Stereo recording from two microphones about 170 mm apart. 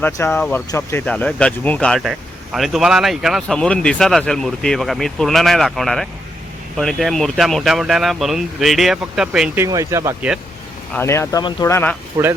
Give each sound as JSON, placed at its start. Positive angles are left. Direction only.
{"t": 0.0, "sound": "speech", "side_deg": 10}
{"t": 9.6, "sound": "speech", "side_deg": -20}
{"t": 10.9, "sound": "speech", "side_deg": 15}
{"t": 12.1, "sound": "speech", "side_deg": -20}